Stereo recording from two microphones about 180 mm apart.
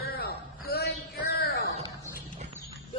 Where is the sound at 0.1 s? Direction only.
60° left (ahead or behind).